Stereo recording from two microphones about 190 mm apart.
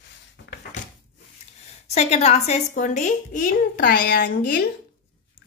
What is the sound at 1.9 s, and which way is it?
A woman's voice, 35° left (ahead or behind).